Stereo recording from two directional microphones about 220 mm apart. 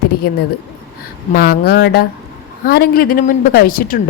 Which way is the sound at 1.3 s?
45° left (ahead or behind).